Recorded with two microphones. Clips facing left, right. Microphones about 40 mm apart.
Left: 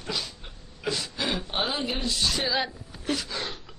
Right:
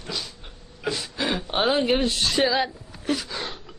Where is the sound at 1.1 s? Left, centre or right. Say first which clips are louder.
Right 7 dB; right.